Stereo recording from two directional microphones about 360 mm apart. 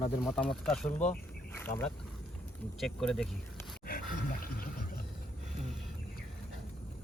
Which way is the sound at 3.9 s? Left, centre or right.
Left.